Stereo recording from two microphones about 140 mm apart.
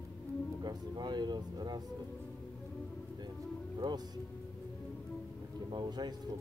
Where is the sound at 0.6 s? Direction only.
30° right (ahead or behind).